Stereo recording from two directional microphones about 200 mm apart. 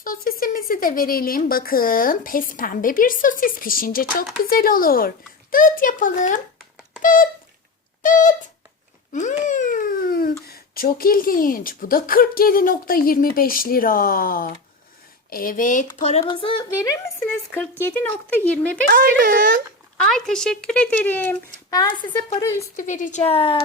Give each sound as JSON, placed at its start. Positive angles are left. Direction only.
{"t": 0.0, "sound": "speech", "side_deg": 45}
{"t": 9.1, "sound": "babbling", "side_deg": 35}
{"t": 10.4, "sound": "speech", "side_deg": 50}
{"t": 17.5, "sound": "speech", "side_deg": 10}
{"t": 18.9, "sound": "speech", "side_deg": -45}
{"t": 20.0, "sound": "speech", "side_deg": 0}
{"t": 21.7, "sound": "speech", "side_deg": 20}
{"t": 22.8, "sound": "speech", "side_deg": 40}